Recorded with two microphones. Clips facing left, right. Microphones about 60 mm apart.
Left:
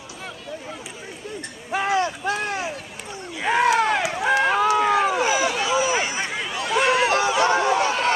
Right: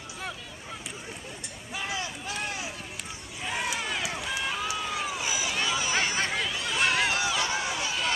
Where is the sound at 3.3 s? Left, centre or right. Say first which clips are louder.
Left 14 dB; left.